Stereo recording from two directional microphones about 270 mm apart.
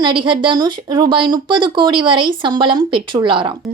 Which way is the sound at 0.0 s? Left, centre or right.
Centre.